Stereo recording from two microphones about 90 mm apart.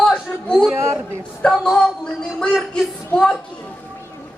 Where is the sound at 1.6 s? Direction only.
5° left (ahead or behind).